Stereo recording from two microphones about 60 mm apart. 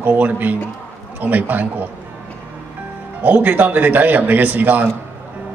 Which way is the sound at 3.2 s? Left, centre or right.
Right.